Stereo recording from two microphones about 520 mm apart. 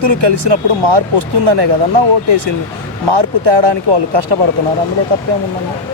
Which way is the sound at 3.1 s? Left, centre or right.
Right.